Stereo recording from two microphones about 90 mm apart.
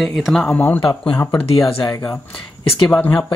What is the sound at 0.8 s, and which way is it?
Speech, 75° left (ahead or behind).